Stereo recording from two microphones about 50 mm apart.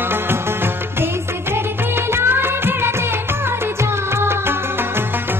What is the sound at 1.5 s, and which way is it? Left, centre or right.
Music of bollywood, right.